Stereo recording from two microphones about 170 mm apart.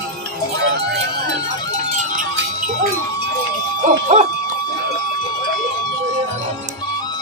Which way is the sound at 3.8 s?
45° right (ahead or behind).